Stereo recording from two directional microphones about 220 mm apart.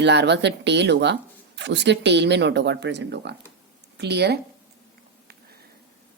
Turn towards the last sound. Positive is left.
turn(degrees=-50)  # may be behind; listen again after turning